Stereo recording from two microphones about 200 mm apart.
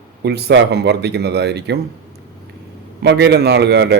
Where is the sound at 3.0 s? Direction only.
60° right (ahead or behind).